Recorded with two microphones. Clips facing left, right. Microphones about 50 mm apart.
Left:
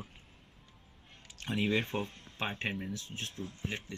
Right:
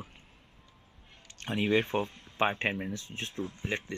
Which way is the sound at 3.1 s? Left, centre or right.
Right.